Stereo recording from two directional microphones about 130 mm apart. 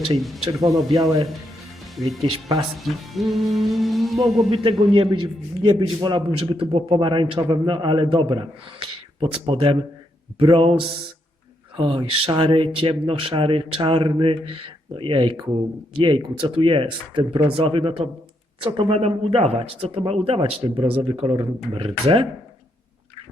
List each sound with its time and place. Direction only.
0.2 s speech: centre (ahead or behind)
0.6 s speech: 25° right (ahead or behind)
2.8 s speech: centre (ahead or behind)
4.2 s a man's voice: 40° right (ahead or behind)